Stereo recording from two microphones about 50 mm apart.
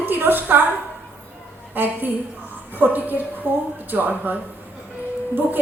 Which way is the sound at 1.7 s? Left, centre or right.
Right.